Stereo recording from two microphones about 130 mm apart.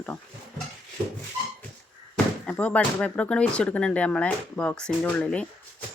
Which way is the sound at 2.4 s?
10° left (ahead or behind).